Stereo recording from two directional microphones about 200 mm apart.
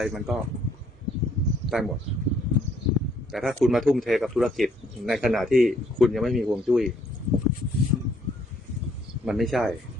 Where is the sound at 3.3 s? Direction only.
Centre (ahead or behind).